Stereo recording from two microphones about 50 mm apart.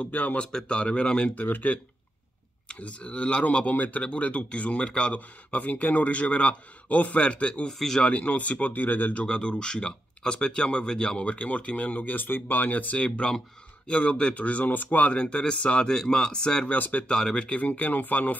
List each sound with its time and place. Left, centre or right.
0.0 s speech: left
0.4 s speech: centre
1.3 s speech: left
2.7 s speech: left
9.2 s speech: centre; by 15.0 s left
15.0 s speech: left
16.6 s speech: left
17.1 s speech: centre
17.5 s speech: left